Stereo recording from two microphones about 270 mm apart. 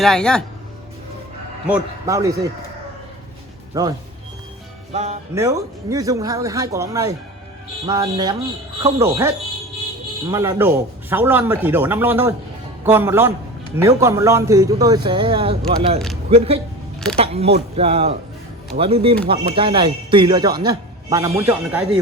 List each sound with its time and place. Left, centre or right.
0.0 s speech: centre
1.6 s speech: centre
3.7 s speech: centre
4.9 s a man's voice: right
5.3 s a man's voice: centre